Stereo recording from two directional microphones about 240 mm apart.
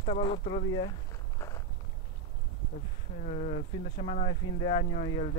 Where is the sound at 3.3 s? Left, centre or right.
Left.